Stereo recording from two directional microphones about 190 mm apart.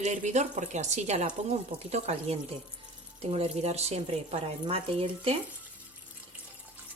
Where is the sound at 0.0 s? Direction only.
40° right (ahead or behind).